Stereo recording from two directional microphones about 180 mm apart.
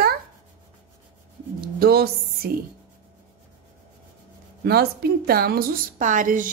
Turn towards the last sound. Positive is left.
turn(degrees=-50)  # may be behind; listen again after turning